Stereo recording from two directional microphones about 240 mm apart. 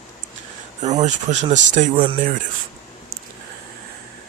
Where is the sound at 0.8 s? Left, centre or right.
Right.